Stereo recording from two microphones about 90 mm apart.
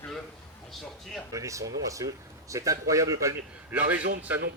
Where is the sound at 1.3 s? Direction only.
35° right (ahead or behind).